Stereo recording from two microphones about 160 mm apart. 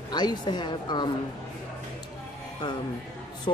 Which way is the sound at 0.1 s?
25° left (ahead or behind).